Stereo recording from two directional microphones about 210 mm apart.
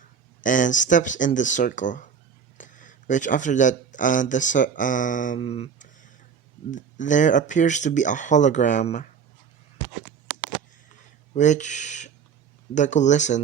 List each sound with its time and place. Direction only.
0.4 s speech: 40° left (ahead or behind)
11.3 s speech: 35° left (ahead or behind)